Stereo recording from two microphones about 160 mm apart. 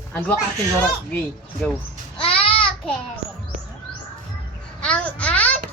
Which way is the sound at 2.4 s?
35° left (ahead or behind).